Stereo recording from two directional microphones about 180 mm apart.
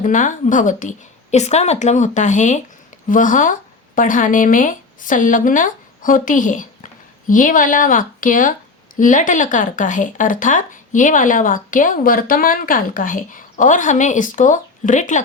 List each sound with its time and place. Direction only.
0.0 s speech: 45° left (ahead or behind)